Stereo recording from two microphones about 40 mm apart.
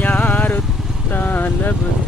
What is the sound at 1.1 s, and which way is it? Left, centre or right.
Speech, left.